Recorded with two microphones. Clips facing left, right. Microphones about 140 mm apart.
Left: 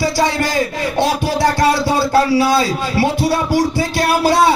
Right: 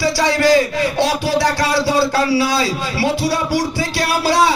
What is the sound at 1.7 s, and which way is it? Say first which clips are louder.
A man's voice: left 1 dB; 50° left (ahead or behind).